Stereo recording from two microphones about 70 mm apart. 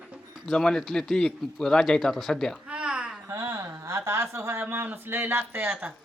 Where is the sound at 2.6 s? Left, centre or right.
Centre.